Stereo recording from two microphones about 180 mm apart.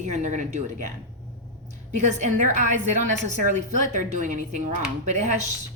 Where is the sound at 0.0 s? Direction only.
40° right (ahead or behind).